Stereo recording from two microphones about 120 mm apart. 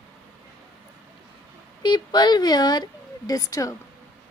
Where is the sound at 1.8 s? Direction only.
35° left (ahead or behind).